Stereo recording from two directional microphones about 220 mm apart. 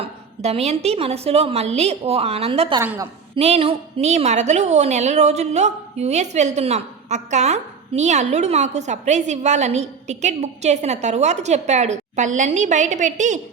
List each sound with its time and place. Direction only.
0.0 s a woman's voice: 30° right (ahead or behind)
2.8 s a woman's voice: 10° right (ahead or behind)
3.3 s a woman's voice: 25° right (ahead or behind)